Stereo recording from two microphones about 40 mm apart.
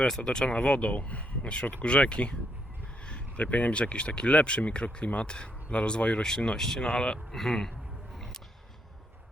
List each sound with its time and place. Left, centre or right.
0.2 s speech: left
7.3 s speech: centre